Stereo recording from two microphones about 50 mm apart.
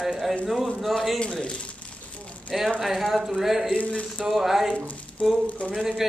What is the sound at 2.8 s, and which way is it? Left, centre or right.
Speech, centre.